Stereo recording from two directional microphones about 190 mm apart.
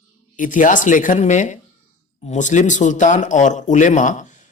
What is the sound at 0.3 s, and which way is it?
Speech, 45° left (ahead or behind).